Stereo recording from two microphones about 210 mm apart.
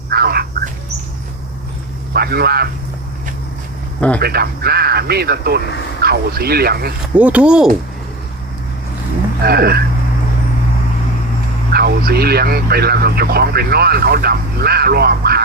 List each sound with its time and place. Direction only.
0.1 s a sound: 45° right (ahead or behind)
2.1 s a man's voice: 50° right (ahead or behind)
4.2 s speech: 50° right (ahead or behind)
7.2 s speech: 5° right (ahead or behind)
9.4 s speech: 45° right (ahead or behind)
11.7 s speech: 45° right (ahead or behind)